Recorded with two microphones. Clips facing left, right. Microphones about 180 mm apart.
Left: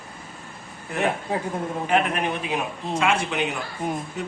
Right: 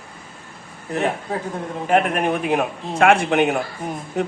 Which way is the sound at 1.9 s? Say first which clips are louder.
Right 5 dB; 50° right (ahead or behind).